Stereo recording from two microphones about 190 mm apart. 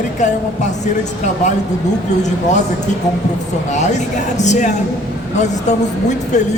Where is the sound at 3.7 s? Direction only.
40° left (ahead or behind).